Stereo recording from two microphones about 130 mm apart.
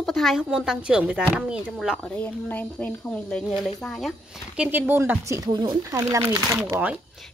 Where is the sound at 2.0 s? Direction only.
10° left (ahead or behind); by 6.6 s 25° right (ahead or behind).